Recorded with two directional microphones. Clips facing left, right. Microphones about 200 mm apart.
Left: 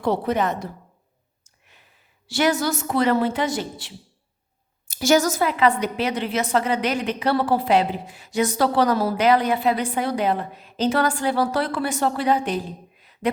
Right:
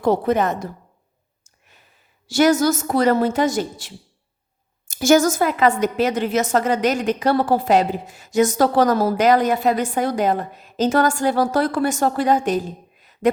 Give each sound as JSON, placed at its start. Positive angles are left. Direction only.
{"t": 0.0, "sound": "a woman's voice", "side_deg": -45}
{"t": 1.5, "sound": "a sound", "side_deg": -45}
{"t": 2.2, "sound": "a woman's voice", "side_deg": -45}